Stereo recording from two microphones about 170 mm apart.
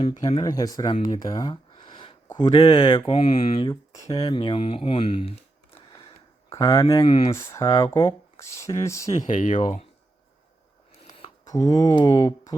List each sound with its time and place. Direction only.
0.2 s speech: 25° left (ahead or behind)
1.1 s a sound: 25° left (ahead or behind)
2.3 s speech: 25° left (ahead or behind)
4.2 s speech: 30° left (ahead or behind)
6.5 s speech: 20° left (ahead or behind)
7.0 s speech: 35° left (ahead or behind)
7.3 s speech: 20° left (ahead or behind)
9.0 s speech: 45° left (ahead or behind)
11.4 s speech: 20° left (ahead or behind)